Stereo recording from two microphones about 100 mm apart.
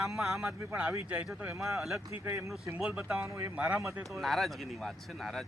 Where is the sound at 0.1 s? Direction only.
5° right (ahead or behind).